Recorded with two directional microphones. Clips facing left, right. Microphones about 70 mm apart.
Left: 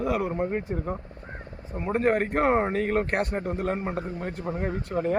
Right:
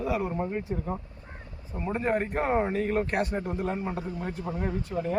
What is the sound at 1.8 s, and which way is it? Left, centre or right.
Speech, left.